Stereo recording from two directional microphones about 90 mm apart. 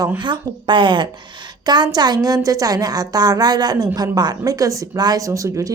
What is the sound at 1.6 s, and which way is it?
A woman's voice, 50° right (ahead or behind).